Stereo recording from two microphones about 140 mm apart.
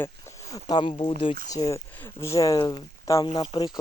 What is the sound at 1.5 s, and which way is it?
Speech, 25° left (ahead or behind).